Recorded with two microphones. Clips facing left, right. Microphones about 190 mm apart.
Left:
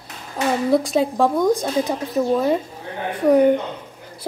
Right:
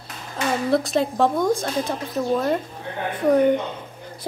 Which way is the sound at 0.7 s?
10° left (ahead or behind).